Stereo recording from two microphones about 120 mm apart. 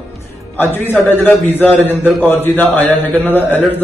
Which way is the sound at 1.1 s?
15° left (ahead or behind).